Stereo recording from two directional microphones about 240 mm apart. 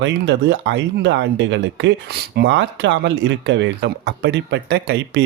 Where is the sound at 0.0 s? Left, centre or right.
Right.